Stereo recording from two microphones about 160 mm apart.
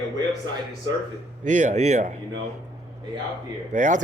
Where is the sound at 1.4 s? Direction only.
50° right (ahead or behind).